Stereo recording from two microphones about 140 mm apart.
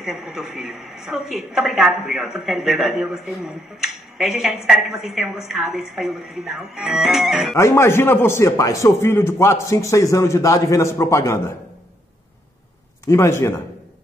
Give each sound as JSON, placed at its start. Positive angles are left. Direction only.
{"t": 0.0, "sound": "a woman's voice", "side_deg": -5}
{"t": 7.5, "sound": "a man's voice", "side_deg": 20}
{"t": 13.0, "sound": "a man's voice", "side_deg": 20}